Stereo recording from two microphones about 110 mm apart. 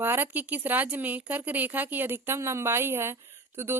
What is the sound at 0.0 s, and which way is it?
Speech, 20° right (ahead or behind).